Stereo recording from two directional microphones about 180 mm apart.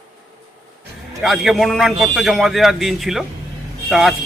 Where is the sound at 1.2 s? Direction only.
Centre (ahead or behind).